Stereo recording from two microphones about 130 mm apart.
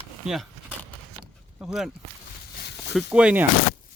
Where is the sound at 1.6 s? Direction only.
5° right (ahead or behind).